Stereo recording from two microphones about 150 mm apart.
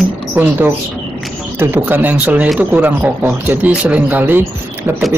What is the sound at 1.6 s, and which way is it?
Speech, 15° right (ahead or behind).